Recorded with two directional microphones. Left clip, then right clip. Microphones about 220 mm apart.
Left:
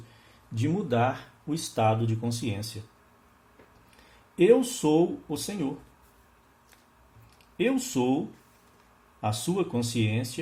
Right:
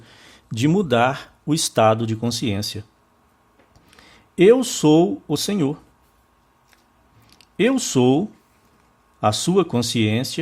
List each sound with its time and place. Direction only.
0.5 s speech: 45° right (ahead or behind)
3.9 s speech: 50° right (ahead or behind)
7.3 s speech: 45° right (ahead or behind)
9.2 s speech: 45° right (ahead or behind)